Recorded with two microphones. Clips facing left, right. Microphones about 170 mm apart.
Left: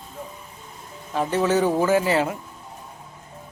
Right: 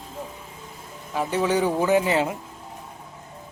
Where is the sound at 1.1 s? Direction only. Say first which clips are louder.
Left 2 dB; 10° right (ahead or behind).